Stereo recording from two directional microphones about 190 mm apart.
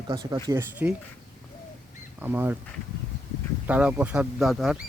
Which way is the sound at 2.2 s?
10° right (ahead or behind).